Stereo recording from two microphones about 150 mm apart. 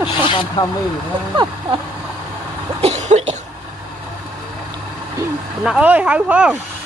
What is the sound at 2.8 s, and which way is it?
Cough, 45° right (ahead or behind).